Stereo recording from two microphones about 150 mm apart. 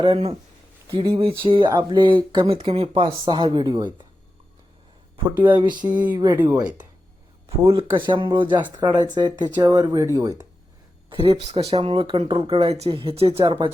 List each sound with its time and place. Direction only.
0.0 s speech: 40° right (ahead or behind)
5.1 s speech: 30° right (ahead or behind)
6.5 s speech: 10° right (ahead or behind)
7.7 s speech: 35° right (ahead or behind); by 10.4 s 20° right (ahead or behind)
11.1 s speech: 40° right (ahead or behind)